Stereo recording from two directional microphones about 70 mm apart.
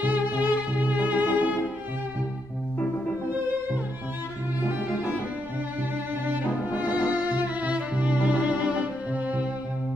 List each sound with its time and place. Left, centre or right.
0.0 s music: right
4.6 s cello: right
6.2 s music: right